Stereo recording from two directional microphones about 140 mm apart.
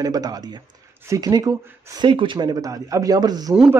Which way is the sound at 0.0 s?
25° right (ahead or behind).